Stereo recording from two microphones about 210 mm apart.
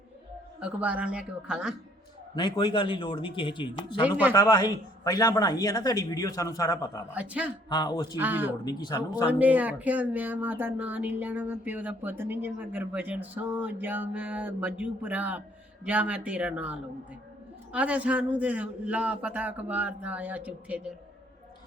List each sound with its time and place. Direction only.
0.6 s speech: 5° right (ahead or behind)
2.3 s a man's voice: 20° left (ahead or behind)
7.1 s speech: 5° right (ahead or behind)
7.7 s speech: 20° left (ahead or behind)
8.1 s speech: 10° right (ahead or behind)
8.6 s speech: 20° left (ahead or behind)
9.2 s speech: 5° right (ahead or behind)